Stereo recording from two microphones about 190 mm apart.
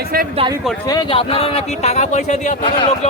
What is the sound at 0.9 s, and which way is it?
Speech, 25° left (ahead or behind).